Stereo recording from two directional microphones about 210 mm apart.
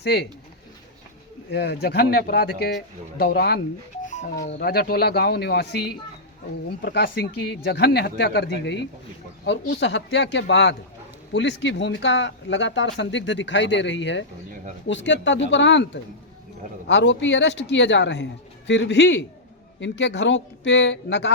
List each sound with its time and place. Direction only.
0.0 s speech: 50° left (ahead or behind)
1.5 s speech: 50° left (ahead or behind)
6.8 s speech: 50° left (ahead or behind)